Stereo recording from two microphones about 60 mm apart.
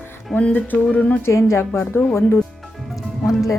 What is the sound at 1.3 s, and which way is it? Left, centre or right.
Speech, left.